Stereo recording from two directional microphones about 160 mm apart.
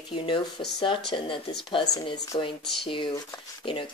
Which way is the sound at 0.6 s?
35° left (ahead or behind).